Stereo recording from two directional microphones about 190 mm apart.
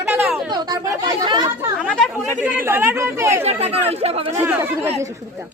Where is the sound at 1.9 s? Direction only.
5° right (ahead or behind).